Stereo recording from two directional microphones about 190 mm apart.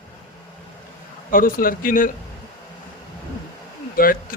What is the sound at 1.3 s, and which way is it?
Speech, 50° left (ahead or behind).